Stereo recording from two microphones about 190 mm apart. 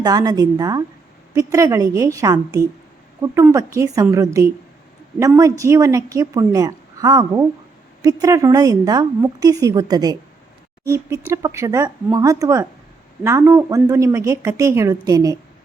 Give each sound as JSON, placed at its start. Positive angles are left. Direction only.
{"t": 0.0, "sound": "a woman's voice", "side_deg": -20}